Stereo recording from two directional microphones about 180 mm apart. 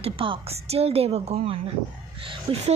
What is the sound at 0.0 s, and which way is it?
A woman's voice, 30° right (ahead or behind).